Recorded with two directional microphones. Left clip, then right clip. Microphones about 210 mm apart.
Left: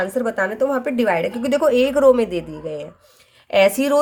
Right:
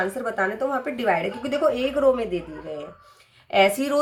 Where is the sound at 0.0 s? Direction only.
50° left (ahead or behind).